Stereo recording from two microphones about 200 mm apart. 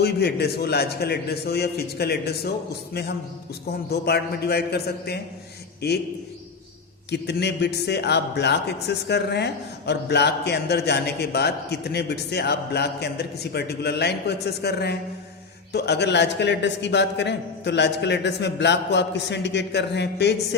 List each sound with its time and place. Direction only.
0.0 s a man's voice: 55° left (ahead or behind)
7.1 s a man's voice: 55° left (ahead or behind)